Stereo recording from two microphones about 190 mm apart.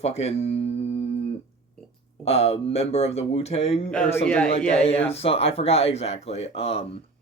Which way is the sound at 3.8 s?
5° left (ahead or behind).